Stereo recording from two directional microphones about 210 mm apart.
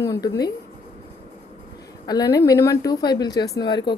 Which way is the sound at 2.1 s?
20° left (ahead or behind).